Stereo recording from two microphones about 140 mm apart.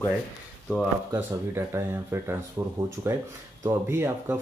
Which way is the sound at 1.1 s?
20° right (ahead or behind).